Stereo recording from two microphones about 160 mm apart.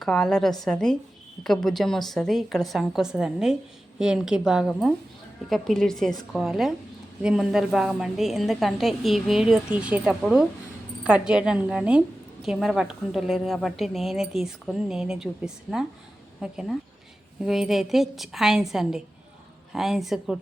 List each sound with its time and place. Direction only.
0.0 s a woman's voice: 5° left (ahead or behind)